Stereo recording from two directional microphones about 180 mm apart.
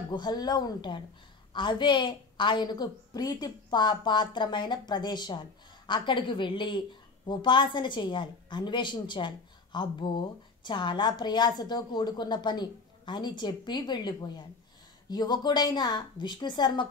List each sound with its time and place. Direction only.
0.1 s a woman's voice: 25° left (ahead or behind)